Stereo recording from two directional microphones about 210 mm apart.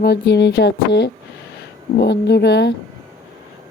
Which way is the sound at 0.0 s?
50° left (ahead or behind).